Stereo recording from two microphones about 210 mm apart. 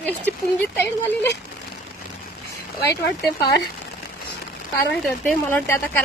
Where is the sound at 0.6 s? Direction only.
10° left (ahead or behind).